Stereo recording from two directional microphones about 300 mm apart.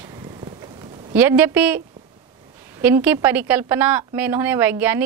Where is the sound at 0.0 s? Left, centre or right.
Centre.